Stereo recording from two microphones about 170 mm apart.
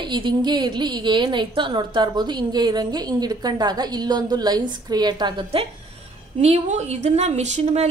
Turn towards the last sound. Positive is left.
turn(degrees=-40)  # may be behind; listen again after turning